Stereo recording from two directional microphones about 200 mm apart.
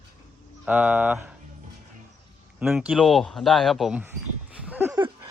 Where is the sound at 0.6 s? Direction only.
10° right (ahead or behind).